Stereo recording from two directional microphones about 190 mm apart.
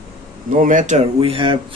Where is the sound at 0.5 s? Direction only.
45° right (ahead or behind).